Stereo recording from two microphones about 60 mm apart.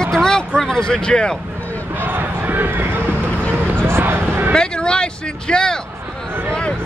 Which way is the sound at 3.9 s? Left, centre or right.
Right.